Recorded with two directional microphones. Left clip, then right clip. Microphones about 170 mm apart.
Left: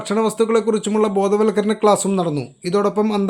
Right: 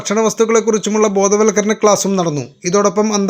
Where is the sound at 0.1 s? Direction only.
15° right (ahead or behind).